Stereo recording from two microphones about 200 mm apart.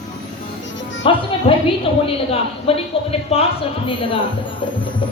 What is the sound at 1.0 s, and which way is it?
A woman's voice, 25° left (ahead or behind).